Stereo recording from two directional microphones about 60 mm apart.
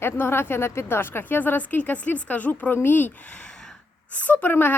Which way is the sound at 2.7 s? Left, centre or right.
Left.